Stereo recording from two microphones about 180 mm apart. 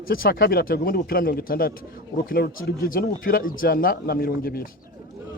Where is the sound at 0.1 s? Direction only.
55° left (ahead or behind).